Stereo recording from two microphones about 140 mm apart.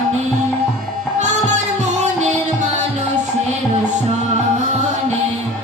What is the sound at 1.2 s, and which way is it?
Music, 55° right (ahead or behind).